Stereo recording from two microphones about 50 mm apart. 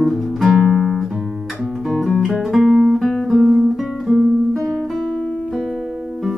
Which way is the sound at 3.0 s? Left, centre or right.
Centre.